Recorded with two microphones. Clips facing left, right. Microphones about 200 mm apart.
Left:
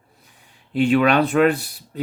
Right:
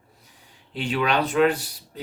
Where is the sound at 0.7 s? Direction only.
50° left (ahead or behind).